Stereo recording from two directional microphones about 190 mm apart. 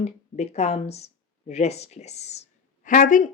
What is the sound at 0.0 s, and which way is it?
Speech, 35° left (ahead or behind).